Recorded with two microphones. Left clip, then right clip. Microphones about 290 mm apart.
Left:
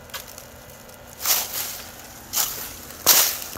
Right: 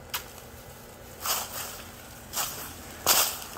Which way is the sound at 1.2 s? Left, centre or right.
Left.